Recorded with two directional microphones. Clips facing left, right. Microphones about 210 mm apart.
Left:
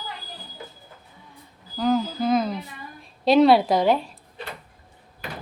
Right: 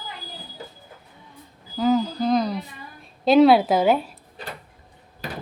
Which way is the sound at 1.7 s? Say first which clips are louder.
Right 2 dB; centre (ahead or behind).